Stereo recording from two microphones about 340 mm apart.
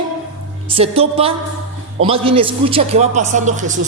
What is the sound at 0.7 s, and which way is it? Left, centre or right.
A man's voice, centre.